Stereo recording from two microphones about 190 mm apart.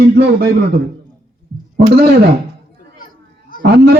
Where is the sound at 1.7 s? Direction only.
55° right (ahead or behind).